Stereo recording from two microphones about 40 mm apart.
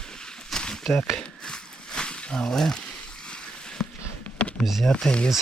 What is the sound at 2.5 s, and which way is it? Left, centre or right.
Speech, centre.